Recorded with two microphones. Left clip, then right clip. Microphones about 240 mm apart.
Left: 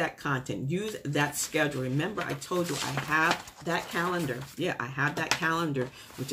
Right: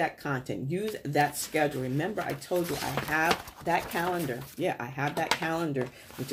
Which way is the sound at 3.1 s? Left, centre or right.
Centre.